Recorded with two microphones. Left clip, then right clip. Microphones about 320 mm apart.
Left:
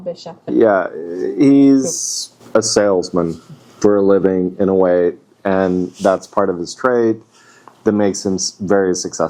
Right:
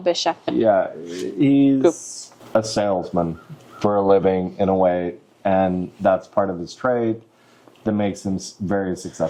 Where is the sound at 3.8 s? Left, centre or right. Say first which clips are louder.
Left 5 dB; right.